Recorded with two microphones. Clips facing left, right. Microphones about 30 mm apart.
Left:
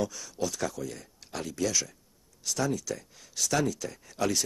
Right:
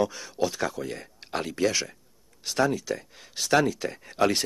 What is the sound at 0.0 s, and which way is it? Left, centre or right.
Speech, right.